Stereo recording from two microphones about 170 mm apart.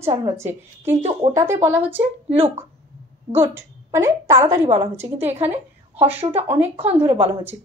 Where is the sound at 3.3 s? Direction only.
15° right (ahead or behind).